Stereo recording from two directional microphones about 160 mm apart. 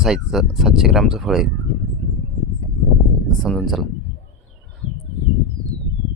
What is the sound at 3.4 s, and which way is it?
Speech, 5° left (ahead or behind).